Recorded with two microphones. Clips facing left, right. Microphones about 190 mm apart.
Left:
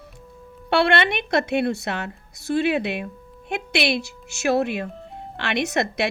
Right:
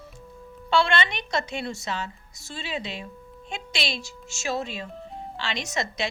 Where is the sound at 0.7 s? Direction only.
60° left (ahead or behind).